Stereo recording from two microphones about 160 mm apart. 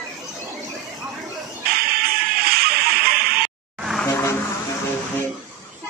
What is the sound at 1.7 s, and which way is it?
Music, 70° right (ahead or behind).